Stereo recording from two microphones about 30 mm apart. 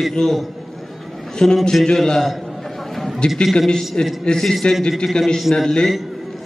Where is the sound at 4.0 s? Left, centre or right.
Left.